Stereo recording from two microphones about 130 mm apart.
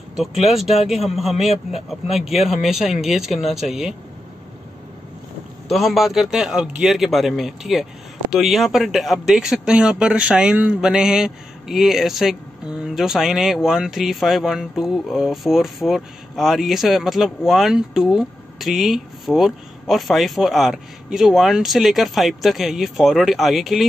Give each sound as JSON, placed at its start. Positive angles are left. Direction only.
{"t": 0.1, "sound": "speech", "side_deg": 0}
{"t": 5.7, "sound": "speech", "side_deg": 0}